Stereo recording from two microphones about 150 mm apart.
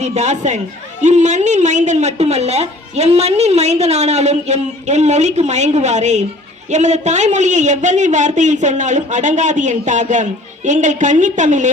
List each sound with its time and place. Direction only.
0.0 s a woman's voice: 50° right (ahead or behind)